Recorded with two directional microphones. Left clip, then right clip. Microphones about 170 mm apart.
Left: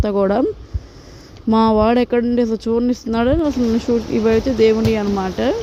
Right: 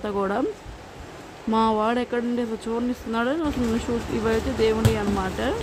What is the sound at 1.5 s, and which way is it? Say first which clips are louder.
Speech: left 7 dB; 35° left (ahead or behind).